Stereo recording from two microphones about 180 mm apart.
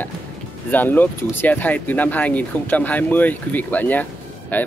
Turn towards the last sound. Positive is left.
turn(degrees=10)  # may be behind; listen again after turning